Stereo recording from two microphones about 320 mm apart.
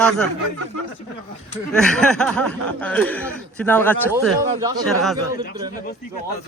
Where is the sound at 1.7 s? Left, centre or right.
Centre.